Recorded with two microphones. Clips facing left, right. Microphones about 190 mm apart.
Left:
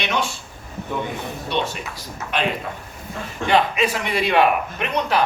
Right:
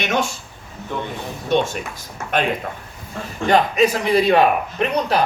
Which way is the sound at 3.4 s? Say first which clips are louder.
Right 3 dB; 40° right (ahead or behind).